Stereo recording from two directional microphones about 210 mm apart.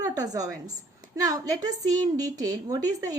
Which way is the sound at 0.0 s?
15° right (ahead or behind).